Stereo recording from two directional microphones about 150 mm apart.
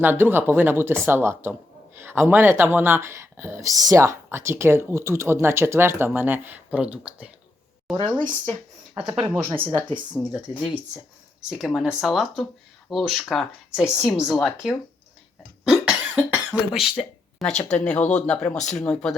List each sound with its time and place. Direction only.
0.0 s speech: 15° right (ahead or behind)
7.9 s speech: 30° right (ahead or behind)
10.2 s speech: 15° left (ahead or behind)
11.4 s speech: 5° right (ahead or behind)
15.6 s cough: 5° right (ahead or behind)
16.5 s speech: centre (ahead or behind)